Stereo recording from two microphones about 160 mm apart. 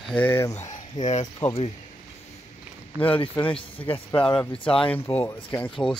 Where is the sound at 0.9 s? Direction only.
45° left (ahead or behind).